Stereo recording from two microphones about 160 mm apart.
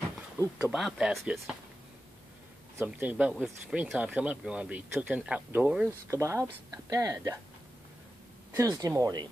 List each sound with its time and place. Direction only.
0.6 s speech: 5° right (ahead or behind)
2.8 s speech: 10° right (ahead or behind)
8.5 s speech: 20° right (ahead or behind)